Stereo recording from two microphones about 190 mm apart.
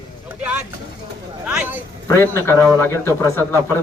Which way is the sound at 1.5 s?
10° right (ahead or behind).